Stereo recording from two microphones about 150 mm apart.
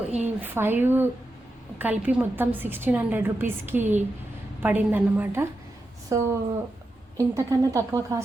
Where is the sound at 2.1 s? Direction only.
10° right (ahead or behind).